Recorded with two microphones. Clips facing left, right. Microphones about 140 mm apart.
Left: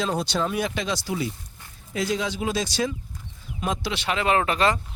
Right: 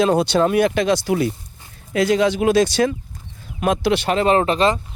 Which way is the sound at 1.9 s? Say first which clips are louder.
Right 10 dB; 70° right (ahead or behind).